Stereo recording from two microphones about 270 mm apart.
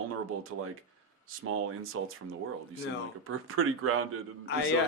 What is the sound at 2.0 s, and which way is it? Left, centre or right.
Speech, right.